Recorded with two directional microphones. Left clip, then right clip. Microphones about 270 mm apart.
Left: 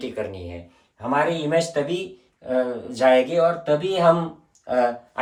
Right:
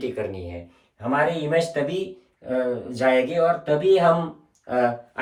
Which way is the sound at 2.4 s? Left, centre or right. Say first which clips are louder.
Left 1 dB; centre.